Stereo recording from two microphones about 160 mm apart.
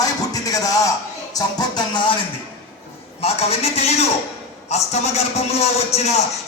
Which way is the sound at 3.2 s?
40° left (ahead or behind).